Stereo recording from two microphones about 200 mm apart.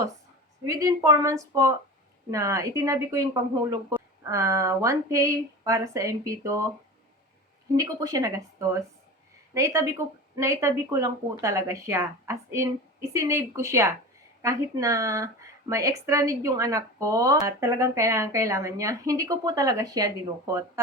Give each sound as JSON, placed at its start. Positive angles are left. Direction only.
{"t": 0.7, "sound": "speech", "side_deg": -15}
{"t": 7.8, "sound": "speech", "side_deg": -15}